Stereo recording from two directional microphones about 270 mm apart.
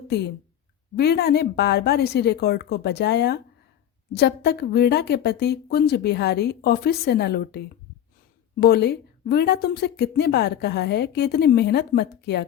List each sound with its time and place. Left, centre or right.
0.1 s a woman's voice: left
8.6 s a woman's voice: left